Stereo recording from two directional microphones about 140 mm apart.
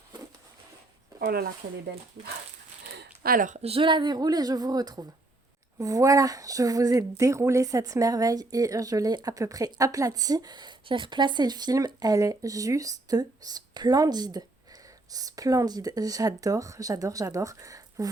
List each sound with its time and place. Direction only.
1.2 s speech: 90° right
3.2 s speech: 80° right
3.6 s speech: 40° right (ahead or behind); by 18.1 s 25° right (ahead or behind)